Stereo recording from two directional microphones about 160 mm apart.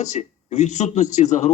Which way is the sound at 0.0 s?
45° left (ahead or behind).